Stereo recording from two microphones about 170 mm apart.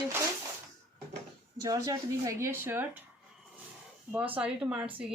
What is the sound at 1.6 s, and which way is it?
A woman's voice, 20° right (ahead or behind).